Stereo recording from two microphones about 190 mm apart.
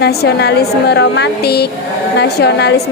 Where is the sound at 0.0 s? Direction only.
60° left (ahead or behind).